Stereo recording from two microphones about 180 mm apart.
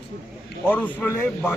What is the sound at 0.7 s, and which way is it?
Speech, 10° left (ahead or behind).